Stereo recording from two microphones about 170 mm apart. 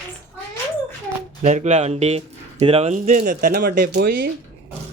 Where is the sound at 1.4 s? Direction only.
45° right (ahead or behind); by 4.3 s 65° right (ahead or behind).